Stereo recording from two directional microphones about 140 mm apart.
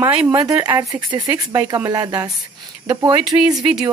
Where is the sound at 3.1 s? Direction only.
5° right (ahead or behind).